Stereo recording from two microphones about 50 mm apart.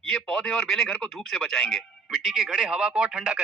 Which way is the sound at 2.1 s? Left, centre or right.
Centre.